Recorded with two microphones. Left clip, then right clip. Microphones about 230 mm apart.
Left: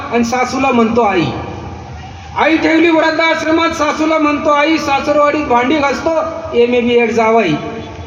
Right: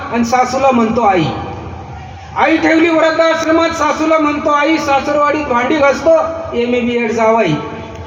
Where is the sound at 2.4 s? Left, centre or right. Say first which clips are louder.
Even; left.